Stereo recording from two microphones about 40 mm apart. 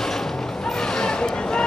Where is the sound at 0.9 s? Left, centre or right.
Centre.